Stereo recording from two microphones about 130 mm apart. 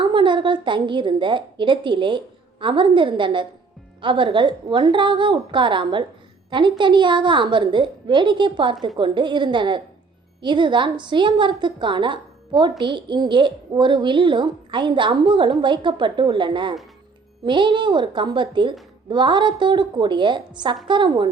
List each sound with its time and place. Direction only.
0.0 s a woman's voice: 40° right (ahead or behind)